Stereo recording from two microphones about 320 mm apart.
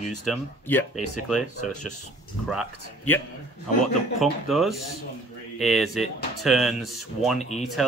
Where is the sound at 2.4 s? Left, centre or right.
Centre.